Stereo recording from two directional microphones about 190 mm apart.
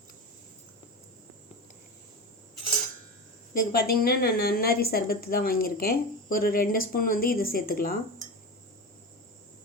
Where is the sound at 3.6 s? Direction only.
50° left (ahead or behind).